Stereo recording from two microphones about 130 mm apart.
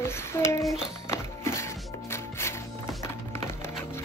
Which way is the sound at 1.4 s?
20° left (ahead or behind).